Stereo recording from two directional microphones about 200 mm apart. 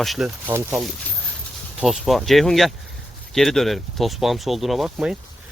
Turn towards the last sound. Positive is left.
turn(degrees=-5)  # may be behind; listen again after turning